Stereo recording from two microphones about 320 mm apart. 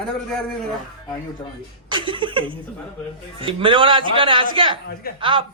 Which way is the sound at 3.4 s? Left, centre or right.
Centre.